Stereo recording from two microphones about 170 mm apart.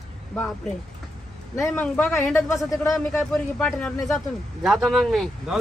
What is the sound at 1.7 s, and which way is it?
A man's voice, 10° left (ahead or behind).